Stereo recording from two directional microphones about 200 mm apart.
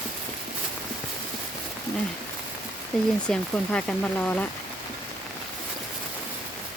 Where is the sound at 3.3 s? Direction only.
5° left (ahead or behind).